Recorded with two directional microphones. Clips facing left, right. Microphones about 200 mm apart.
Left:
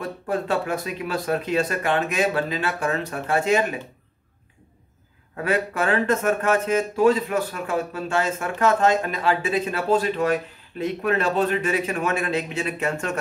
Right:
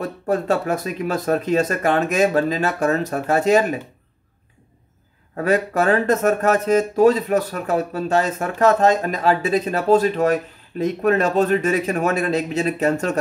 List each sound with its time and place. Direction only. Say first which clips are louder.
0.0 s speech: right 4 dB; 45° right (ahead or behind)
5.3 s speech: right 5 dB; 40° right (ahead or behind)